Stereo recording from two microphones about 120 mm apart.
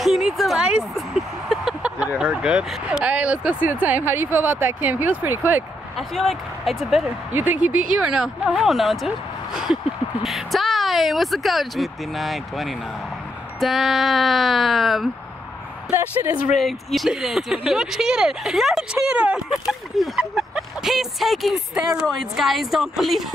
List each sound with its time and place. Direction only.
0.0 s speech: centre (ahead or behind); by 5.6 s 20° right (ahead or behind)
5.9 s speech: centre (ahead or behind)
7.3 s speech: 15° right (ahead or behind); by 15.0 s centre (ahead or behind)
15.9 s speech: 15° right (ahead or behind)
16.5 s speech: centre (ahead or behind)